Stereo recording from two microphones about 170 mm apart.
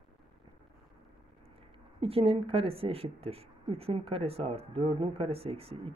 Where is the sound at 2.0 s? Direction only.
35° right (ahead or behind).